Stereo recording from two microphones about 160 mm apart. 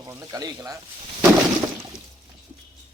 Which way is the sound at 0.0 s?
20° right (ahead or behind).